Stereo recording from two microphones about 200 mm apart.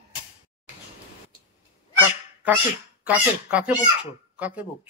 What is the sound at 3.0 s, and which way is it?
Speech, 5° right (ahead or behind).